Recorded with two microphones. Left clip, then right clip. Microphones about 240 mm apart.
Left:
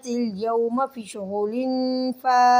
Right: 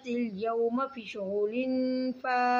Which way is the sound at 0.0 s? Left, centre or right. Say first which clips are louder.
Left 6 dB; centre.